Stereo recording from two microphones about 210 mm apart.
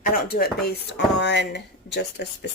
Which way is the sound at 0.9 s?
55° left (ahead or behind).